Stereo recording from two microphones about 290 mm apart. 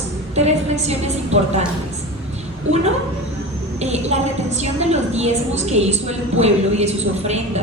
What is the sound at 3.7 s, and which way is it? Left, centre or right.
A woman's voice, right.